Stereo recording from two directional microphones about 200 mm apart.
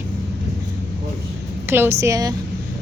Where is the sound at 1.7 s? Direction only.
10° right (ahead or behind).